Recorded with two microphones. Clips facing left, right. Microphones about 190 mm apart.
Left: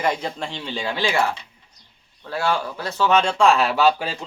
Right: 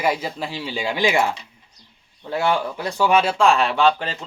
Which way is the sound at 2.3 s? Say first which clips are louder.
Right 2 dB; 20° right (ahead or behind).